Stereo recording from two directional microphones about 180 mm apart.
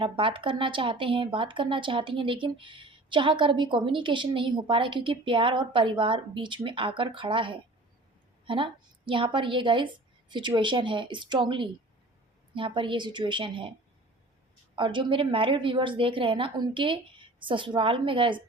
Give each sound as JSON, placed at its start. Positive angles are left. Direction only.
{"t": 0.0, "sound": "speech", "side_deg": -30}
{"t": 14.8, "sound": "speech", "side_deg": -30}